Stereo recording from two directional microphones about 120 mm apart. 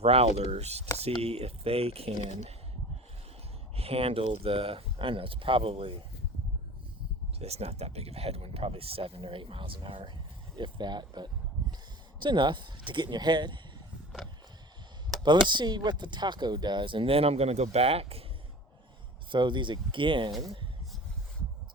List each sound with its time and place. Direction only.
0.0 s speech: 55° right (ahead or behind)
3.8 s speech: 55° right (ahead or behind)
7.3 s speech: 60° right (ahead or behind); by 13.6 s 40° right (ahead or behind)
15.2 s speech: 40° right (ahead or behind); by 18.3 s 55° right (ahead or behind)
19.3 s speech: 40° right (ahead or behind)